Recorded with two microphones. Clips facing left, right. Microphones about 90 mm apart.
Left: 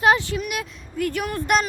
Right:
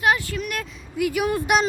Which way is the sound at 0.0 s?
30° left (ahead or behind).